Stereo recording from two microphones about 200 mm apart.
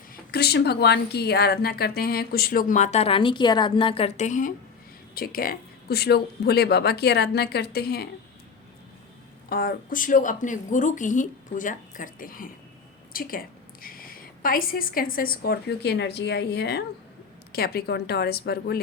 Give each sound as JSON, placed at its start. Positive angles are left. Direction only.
{"t": 0.1, "sound": "a woman's voice", "side_deg": 50}
{"t": 9.5, "sound": "a woman's voice", "side_deg": 45}